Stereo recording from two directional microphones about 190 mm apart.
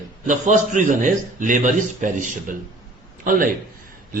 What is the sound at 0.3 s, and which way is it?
A man's voice, 40° right (ahead or behind).